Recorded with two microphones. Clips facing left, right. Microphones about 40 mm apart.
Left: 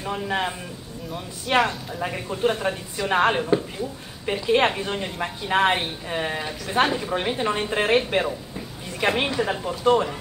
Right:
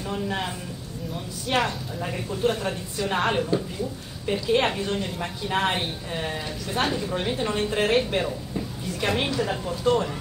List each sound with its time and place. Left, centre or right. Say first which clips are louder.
0.0 s a woman's voice: left 3 dB; left